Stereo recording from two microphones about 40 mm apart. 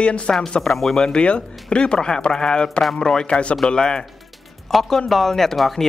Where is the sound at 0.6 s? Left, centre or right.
Centre.